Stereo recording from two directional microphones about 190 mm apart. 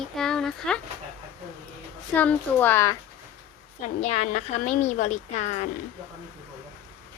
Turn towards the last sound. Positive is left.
turn(degrees=40)  # may be behind; listen again after turning